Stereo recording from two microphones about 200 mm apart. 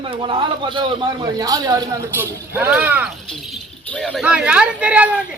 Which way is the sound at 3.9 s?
5° left (ahead or behind).